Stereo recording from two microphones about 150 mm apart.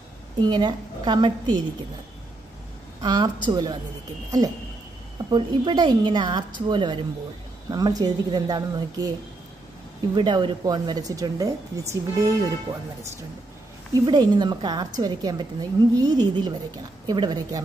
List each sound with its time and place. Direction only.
0.4 s a woman's voice: 30° right (ahead or behind)
3.0 s a woman's voice: 30° right (ahead or behind)
10.1 s a woman's voice: 30° right (ahead or behind)
14.0 s a woman's voice: 30° right (ahead or behind)